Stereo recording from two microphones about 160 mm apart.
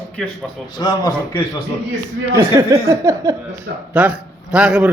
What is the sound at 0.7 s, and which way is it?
Speech, 25° left (ahead or behind).